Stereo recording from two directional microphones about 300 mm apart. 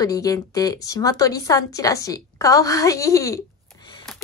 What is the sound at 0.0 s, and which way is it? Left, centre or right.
A woman's voice, centre.